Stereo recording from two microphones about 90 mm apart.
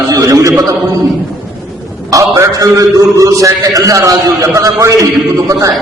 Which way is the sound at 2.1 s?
40° right (ahead or behind).